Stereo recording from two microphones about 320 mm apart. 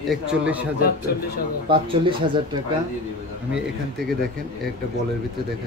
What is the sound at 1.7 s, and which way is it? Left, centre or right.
Speech, centre.